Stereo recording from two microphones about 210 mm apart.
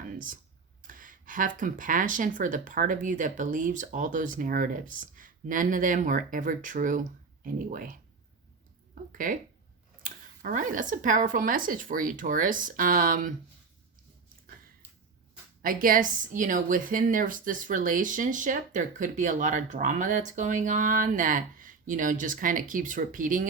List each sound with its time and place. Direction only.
0.0 s computer keyboard: 40° right (ahead or behind)
0.8 s a woman's voice: 40° right (ahead or behind)
9.1 s a woman's voice: 40° right (ahead or behind)
15.6 s a woman's voice: 40° right (ahead or behind)